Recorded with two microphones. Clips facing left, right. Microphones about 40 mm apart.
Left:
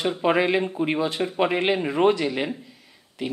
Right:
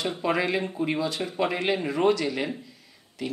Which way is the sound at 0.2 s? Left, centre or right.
Left.